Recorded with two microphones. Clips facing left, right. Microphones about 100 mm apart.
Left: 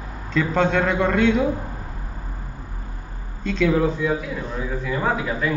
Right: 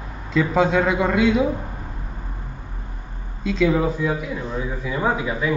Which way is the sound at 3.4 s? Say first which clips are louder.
Even; 5° right (ahead or behind).